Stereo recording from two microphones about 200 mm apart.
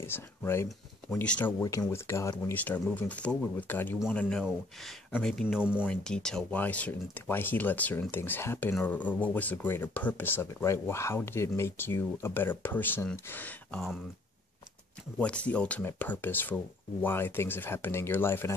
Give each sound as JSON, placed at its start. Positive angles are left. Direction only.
{"t": 0.0, "sound": "speech", "side_deg": 10}
{"t": 15.1, "sound": "speech", "side_deg": 5}